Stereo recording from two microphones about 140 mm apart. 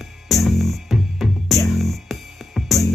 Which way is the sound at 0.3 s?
Centre (ahead or behind).